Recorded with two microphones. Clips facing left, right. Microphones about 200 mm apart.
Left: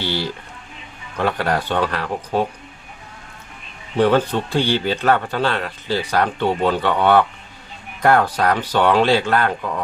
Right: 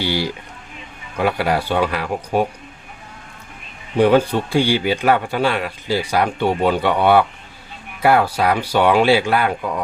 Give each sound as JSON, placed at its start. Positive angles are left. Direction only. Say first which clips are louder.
{"t": 0.0, "sound": "a man's voice", "louder": "right 3 dB", "side_deg": -10}
{"t": 3.9, "sound": "a man's voice", "louder": "right 2 dB", "side_deg": -10}